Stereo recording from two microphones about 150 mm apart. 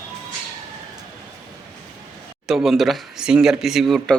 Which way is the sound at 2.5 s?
Centre (ahead or behind).